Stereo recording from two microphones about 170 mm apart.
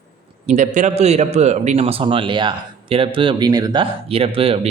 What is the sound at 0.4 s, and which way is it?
A man's voice, 45° right (ahead or behind).